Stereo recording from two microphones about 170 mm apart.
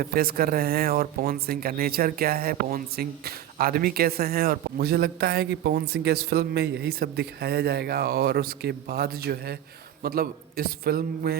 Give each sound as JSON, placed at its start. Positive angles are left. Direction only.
{"t": 0.0, "sound": "speech", "side_deg": -60}